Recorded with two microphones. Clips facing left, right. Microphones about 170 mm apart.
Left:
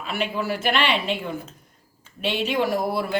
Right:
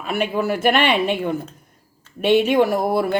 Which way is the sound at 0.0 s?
50° right (ahead or behind).